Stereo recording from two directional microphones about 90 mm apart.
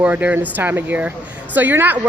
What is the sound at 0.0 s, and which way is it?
A woman's voice, 15° right (ahead or behind).